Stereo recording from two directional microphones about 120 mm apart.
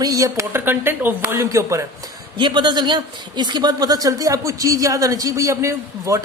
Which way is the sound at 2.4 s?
40° right (ahead or behind).